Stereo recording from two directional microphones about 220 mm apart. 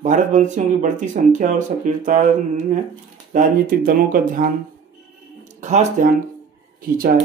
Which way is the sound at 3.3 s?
40° right (ahead or behind).